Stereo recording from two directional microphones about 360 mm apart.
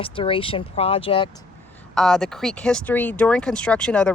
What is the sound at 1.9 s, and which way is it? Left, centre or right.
Speech, centre.